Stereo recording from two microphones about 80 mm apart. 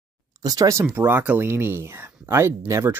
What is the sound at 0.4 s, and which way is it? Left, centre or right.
Speech, right.